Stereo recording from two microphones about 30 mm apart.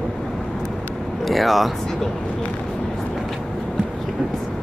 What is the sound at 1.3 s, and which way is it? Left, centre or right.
Speech, centre.